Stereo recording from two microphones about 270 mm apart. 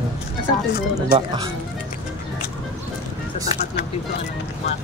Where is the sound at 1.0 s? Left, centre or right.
Centre.